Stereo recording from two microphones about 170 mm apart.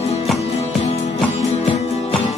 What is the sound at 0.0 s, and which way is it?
Music, 40° left (ahead or behind).